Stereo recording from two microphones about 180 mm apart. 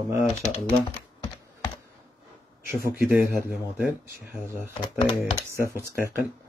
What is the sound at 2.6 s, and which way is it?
Speech, 10° right (ahead or behind).